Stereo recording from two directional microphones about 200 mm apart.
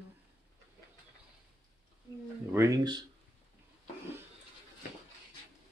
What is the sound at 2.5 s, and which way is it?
Speech, 15° right (ahead or behind).